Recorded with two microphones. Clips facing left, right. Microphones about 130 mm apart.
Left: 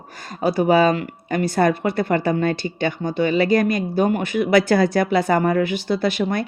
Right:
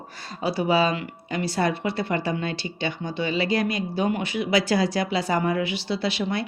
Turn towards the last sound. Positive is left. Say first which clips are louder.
# left 5 dB
turn(degrees=50)  # may be behind; listen again after turning